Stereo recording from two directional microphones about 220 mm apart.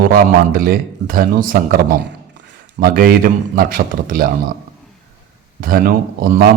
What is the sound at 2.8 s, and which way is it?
A man's voice, 40° right (ahead or behind).